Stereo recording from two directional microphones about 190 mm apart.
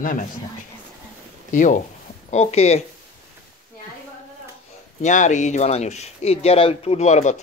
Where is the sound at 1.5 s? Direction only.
40° left (ahead or behind).